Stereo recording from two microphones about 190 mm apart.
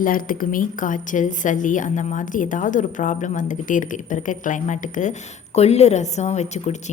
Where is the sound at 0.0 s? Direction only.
45° left (ahead or behind).